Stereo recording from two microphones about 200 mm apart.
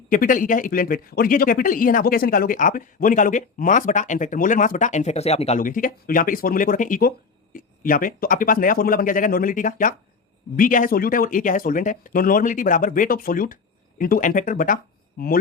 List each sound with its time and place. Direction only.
0.1 s speech: 40° left (ahead or behind)